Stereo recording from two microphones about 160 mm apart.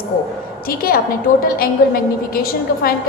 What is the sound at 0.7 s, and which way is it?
A woman's voice, 70° left (ahead or behind).